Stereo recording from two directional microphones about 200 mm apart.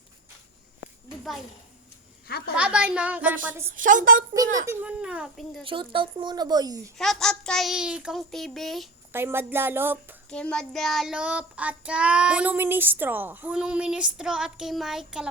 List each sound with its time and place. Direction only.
2.6 s a child's voice: 5° right (ahead or behind)
3.8 s a woman's voice: 40° right (ahead or behind)
4.7 s child singing: 5° right (ahead or behind)
5.6 s speech: 25° right (ahead or behind)
7.0 s child singing: centre (ahead or behind)
9.1 s a child's voice: 10° right (ahead or behind)
10.2 s child singing: 5° left (ahead or behind)